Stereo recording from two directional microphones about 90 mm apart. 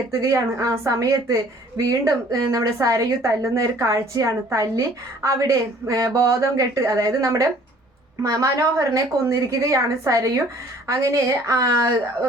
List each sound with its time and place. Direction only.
0.1 s a woman's voice: 35° right (ahead or behind)